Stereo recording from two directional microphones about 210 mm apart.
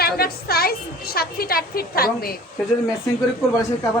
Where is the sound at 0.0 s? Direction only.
45° left (ahead or behind).